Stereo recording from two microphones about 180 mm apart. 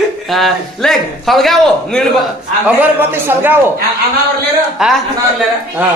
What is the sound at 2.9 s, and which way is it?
Speech, 10° right (ahead or behind).